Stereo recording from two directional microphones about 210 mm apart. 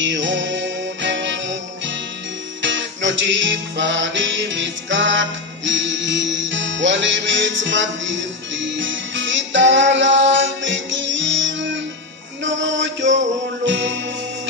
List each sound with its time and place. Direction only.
0.0 s music: 60° right (ahead or behind)
2.6 s music: 60° right (ahead or behind)